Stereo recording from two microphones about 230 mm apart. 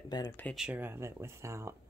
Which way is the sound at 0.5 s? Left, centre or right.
Centre.